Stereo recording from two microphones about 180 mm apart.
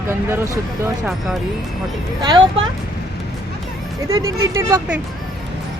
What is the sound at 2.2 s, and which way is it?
Speech, 25° right (ahead or behind).